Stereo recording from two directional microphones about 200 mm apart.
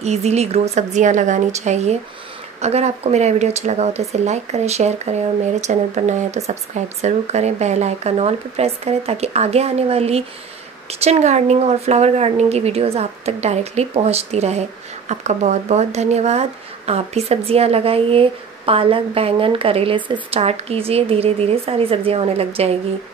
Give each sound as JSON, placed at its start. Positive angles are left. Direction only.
{"t": 0.0, "sound": "a woman's voice", "side_deg": -35}